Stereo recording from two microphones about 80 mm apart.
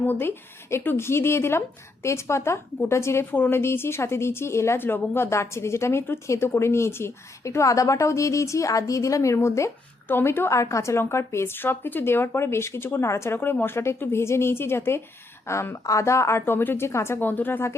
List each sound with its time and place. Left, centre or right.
0.0 s speech: left
10.1 s speech: left